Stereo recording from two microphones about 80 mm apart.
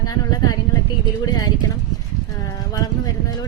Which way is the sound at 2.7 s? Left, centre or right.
Left.